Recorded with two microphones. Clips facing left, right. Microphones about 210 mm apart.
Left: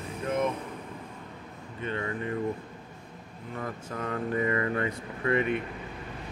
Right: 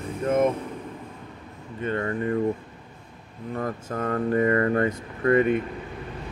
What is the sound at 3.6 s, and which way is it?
Speech, 45° right (ahead or behind).